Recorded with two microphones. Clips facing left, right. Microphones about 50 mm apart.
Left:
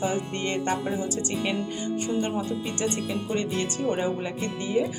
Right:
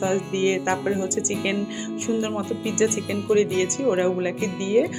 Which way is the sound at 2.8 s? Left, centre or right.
Right.